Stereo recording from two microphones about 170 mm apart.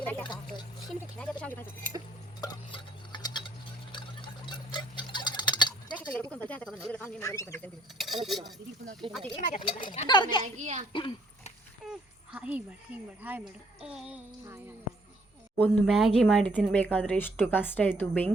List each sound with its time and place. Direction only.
0.0 s speech: 10° left (ahead or behind)
2.4 s a sound: 25° left (ahead or behind)
3.9 s clock: 30° left (ahead or behind)
6.3 s speech: 10° left (ahead or behind)
7.2 s speech: 15° left (ahead or behind)
7.9 s a sound: centre (ahead or behind)
9.6 s speech: 25° left (ahead or behind)
10.4 s a woman's voice: 40° right (ahead or behind)
10.9 s a sound: 30° left (ahead or behind)
11.9 s a sound: 5° right (ahead or behind)
13.2 s child singing: 10° right (ahead or behind)
15.5 s speech: 5° left (ahead or behind)